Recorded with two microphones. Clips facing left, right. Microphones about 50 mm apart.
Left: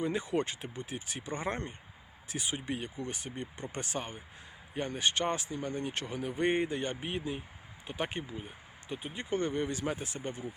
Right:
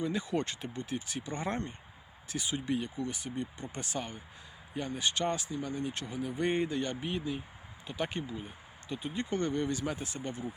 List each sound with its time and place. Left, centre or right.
0.0 s speech: left
6.3 s speech: left